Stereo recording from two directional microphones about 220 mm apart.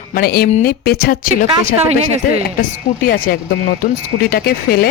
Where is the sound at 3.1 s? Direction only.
40° left (ahead or behind).